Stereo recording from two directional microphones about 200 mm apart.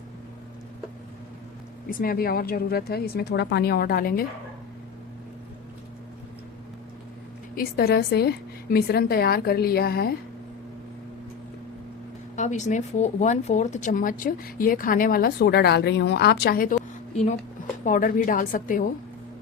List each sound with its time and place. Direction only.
1.9 s speech: 45° left (ahead or behind)
7.5 s speech: 50° left (ahead or behind)
12.4 s speech: 35° left (ahead or behind)
17.8 s speech: 40° left (ahead or behind)